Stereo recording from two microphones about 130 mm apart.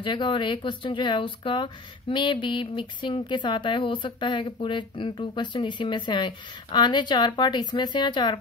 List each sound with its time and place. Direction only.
0.0 s speech: 40° left (ahead or behind)